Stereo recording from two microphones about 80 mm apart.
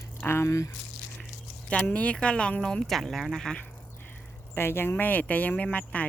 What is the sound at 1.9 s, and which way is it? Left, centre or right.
Speech, centre.